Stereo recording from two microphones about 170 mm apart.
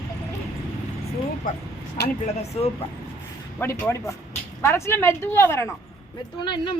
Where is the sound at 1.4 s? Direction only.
55° left (ahead or behind).